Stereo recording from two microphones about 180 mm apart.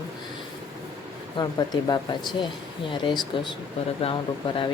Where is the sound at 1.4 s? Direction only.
20° left (ahead or behind).